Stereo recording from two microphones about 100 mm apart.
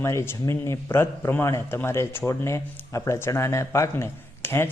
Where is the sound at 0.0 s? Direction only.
30° left (ahead or behind).